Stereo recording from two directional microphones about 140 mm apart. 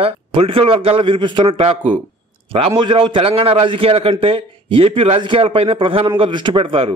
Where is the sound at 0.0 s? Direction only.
40° right (ahead or behind).